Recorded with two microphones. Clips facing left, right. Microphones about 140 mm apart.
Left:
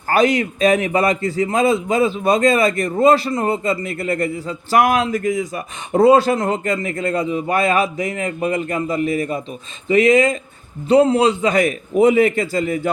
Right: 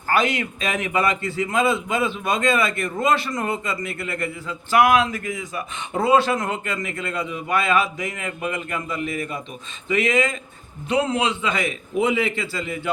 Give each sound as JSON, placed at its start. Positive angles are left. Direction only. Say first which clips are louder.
{"t": 0.1, "sound": "a man's voice", "louder": "left 6 dB", "side_deg": 40}